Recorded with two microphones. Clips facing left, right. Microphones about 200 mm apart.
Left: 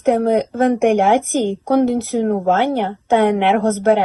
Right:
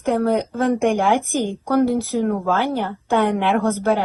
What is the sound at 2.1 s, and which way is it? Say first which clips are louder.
Speech: left 4 dB; 65° left (ahead or behind).